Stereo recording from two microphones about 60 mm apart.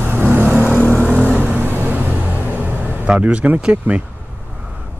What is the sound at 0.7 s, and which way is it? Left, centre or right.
Vehicle, left.